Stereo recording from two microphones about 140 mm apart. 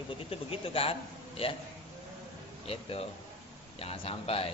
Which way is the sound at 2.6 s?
45° left (ahead or behind).